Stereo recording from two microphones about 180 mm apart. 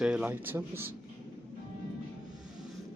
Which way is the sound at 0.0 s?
5° right (ahead or behind).